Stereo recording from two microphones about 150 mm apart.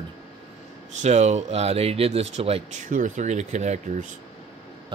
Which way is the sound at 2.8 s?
60° right (ahead or behind).